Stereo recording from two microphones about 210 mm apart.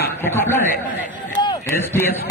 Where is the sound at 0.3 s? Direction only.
10° left (ahead or behind).